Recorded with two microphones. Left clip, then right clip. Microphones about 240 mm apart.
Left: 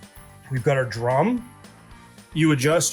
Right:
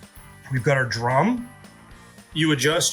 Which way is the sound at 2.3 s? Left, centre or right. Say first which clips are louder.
Left 1 dB; left.